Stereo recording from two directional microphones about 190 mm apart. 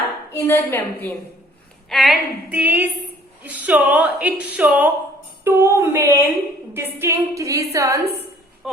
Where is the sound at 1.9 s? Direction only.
Centre (ahead or behind); by 8.0 s 15° right (ahead or behind).